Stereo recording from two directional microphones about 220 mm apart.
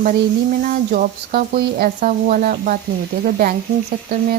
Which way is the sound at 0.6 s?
40° right (ahead or behind).